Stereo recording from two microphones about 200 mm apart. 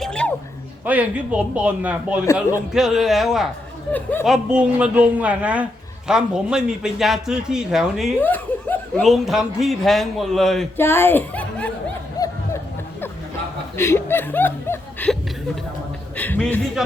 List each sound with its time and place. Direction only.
0.0 s a sound: 5° left (ahead or behind)
0.9 s a man's voice: 5° right (ahead or behind)
2.2 s a man's voice: 15° left (ahead or behind)
2.7 s speech: centre (ahead or behind)
3.9 s a man's voice: 10° left (ahead or behind)
4.3 s a man's voice: 5° right (ahead or behind)
8.2 s speech: 10° left (ahead or behind)
12.2 s a sound: 20° left (ahead or behind)
13.7 s speech: 10° left (ahead or behind)
16.1 s a man's voice: 10° left (ahead or behind)